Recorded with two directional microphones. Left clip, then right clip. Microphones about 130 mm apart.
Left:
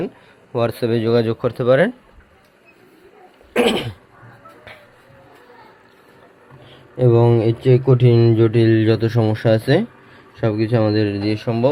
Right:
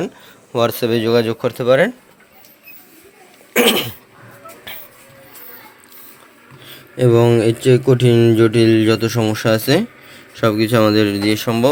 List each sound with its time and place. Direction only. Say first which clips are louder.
0.5 s speech: right 3 dB; 10° left (ahead or behind); by 1.9 s 30° left (ahead or behind)
3.5 s cough: right 3 dB; 20° left (ahead or behind)
6.9 s speech: right 2 dB; 5° left (ahead or behind)
10.3 s speech: right 4 dB; 5° left (ahead or behind)